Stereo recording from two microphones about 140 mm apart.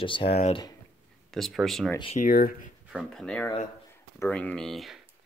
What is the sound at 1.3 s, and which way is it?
Speech, centre (ahead or behind).